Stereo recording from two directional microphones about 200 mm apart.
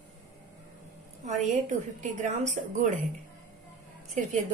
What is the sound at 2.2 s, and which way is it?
Speech, 35° right (ahead or behind).